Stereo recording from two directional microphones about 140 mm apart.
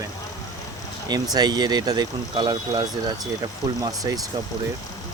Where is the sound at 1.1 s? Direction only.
30° right (ahead or behind).